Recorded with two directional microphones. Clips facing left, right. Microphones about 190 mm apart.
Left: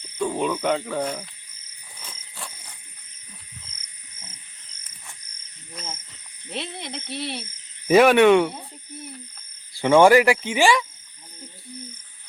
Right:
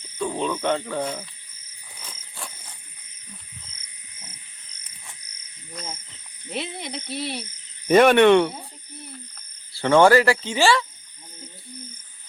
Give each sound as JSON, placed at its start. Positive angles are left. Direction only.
{"t": 0.2, "sound": "speech", "side_deg": 10}
{"t": 5.7, "sound": "cricket", "side_deg": 0}
{"t": 6.5, "sound": "speech", "side_deg": -10}
{"t": 7.9, "sound": "cricket", "side_deg": 5}
{"t": 9.7, "sound": "speech", "side_deg": 15}